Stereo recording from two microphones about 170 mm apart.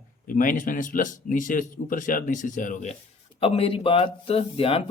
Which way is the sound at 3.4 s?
30° left (ahead or behind).